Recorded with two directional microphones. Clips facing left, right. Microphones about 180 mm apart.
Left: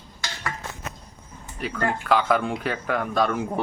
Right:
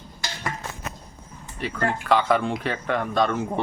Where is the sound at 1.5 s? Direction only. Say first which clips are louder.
Even; centre (ahead or behind).